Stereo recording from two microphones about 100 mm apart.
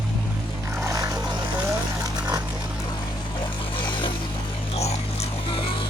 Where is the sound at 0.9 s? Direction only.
35° right (ahead or behind).